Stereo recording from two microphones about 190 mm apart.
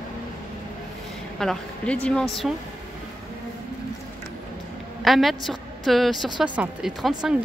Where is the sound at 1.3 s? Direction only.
5° left (ahead or behind).